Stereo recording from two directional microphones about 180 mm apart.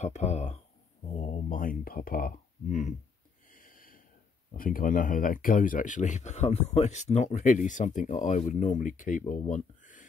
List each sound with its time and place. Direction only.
0.0 s speech: 40° left (ahead or behind)
3.5 s snort: 50° left (ahead or behind)
4.6 s speech: 50° left (ahead or behind)